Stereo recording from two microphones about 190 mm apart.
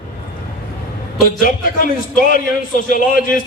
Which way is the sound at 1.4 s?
45° left (ahead or behind).